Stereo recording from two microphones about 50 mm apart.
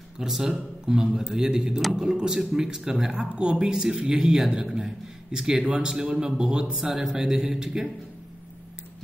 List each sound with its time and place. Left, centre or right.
0.2 s speech: centre